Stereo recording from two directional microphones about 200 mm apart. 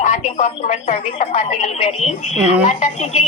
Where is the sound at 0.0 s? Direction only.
35° left (ahead or behind).